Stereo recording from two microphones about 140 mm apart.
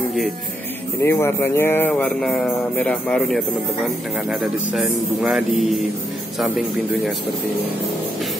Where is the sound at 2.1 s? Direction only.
Centre (ahead or behind).